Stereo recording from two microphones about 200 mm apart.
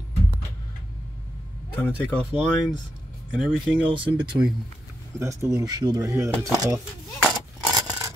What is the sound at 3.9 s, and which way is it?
Speech, 25° right (ahead or behind).